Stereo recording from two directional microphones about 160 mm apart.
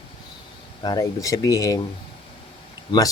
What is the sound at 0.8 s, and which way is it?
Speech, 25° left (ahead or behind).